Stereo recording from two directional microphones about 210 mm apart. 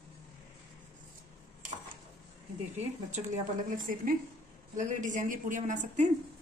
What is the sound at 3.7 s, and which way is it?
A woman's voice, 40° right (ahead or behind).